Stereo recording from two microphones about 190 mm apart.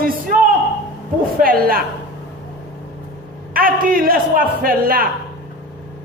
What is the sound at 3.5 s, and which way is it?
A man's voice, 50° right (ahead or behind).